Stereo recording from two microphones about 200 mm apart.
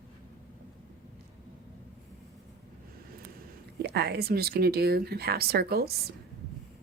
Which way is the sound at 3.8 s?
55° right (ahead or behind).